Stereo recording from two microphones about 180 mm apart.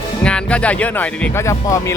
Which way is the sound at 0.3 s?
5° left (ahead or behind).